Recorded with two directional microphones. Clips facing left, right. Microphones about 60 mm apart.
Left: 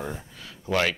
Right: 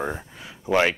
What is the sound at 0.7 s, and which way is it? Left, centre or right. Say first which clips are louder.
Speech: right 4 dB; right.